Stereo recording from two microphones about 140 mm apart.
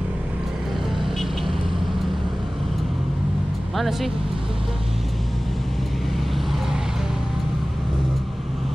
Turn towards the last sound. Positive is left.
turn(degrees=-5)  # may be behind; listen again after turning